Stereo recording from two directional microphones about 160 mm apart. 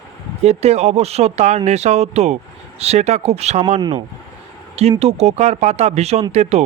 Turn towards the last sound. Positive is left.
turn(degrees=-45)  # may be behind; listen again after turning